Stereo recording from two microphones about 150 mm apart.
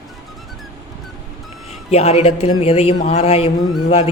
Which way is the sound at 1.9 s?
45° left (ahead or behind).